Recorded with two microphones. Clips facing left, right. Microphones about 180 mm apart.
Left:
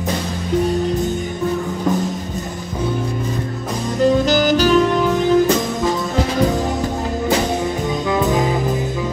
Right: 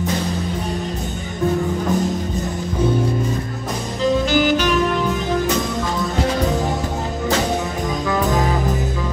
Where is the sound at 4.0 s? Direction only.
40° left (ahead or behind).